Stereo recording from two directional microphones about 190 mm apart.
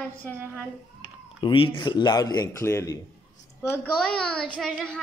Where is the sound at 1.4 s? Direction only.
25° left (ahead or behind); by 4.7 s 5° left (ahead or behind).